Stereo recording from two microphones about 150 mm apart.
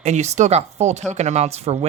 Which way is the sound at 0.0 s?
50° right (ahead or behind).